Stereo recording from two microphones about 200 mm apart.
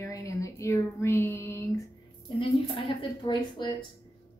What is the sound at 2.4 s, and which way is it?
A woman's voice, 25° left (ahead or behind).